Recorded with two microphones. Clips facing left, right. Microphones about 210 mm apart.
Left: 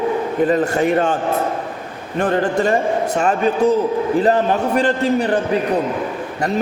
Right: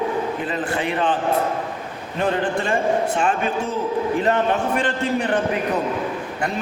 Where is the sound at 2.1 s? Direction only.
45° left (ahead or behind).